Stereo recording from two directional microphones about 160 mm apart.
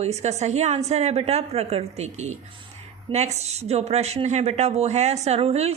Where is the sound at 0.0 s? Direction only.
45° right (ahead or behind).